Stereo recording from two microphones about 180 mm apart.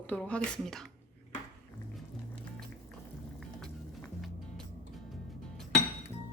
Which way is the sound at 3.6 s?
5° left (ahead or behind).